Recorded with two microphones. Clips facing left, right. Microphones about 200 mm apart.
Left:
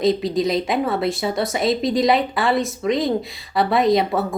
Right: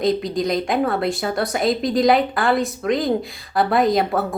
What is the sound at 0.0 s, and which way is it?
A woman's voice, centre (ahead or behind).